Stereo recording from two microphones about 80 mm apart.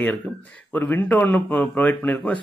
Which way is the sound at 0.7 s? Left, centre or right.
Left.